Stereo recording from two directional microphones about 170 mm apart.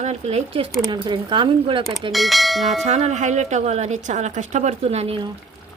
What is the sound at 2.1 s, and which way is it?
Speech, centre (ahead or behind).